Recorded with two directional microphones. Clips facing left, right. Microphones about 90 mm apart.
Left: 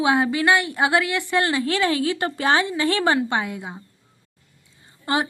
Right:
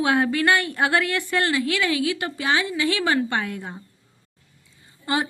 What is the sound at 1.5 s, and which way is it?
A woman's voice, 35° left (ahead or behind).